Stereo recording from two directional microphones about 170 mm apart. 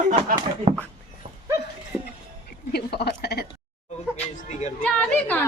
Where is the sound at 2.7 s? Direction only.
70° left (ahead or behind).